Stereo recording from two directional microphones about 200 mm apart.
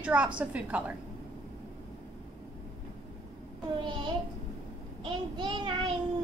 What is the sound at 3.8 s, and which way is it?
Child singing, 20° right (ahead or behind).